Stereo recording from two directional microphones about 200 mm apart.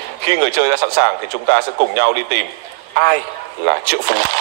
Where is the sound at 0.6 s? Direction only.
55° right (ahead or behind).